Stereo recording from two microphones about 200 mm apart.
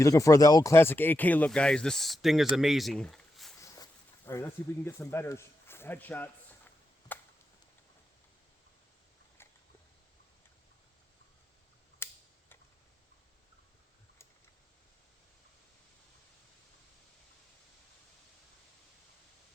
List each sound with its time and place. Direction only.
0.0 s speech: 15° left (ahead or behind)
3.6 s walk: 15° left (ahead or behind)
4.3 s speech: 10° left (ahead or behind)
7.1 s a sound: 10° left (ahead or behind)
12.0 s tick-tock: 10° left (ahead or behind)